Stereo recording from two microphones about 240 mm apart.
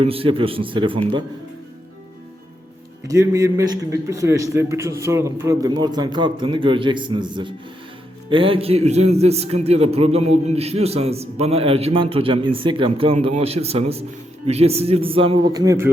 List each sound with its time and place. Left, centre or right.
0.0 s a man's voice: right
3.1 s a man's voice: centre